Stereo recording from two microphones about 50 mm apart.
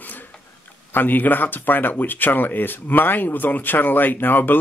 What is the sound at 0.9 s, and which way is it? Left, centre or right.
Speech, left.